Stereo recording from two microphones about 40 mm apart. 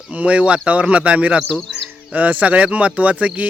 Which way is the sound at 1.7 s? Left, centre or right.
Right.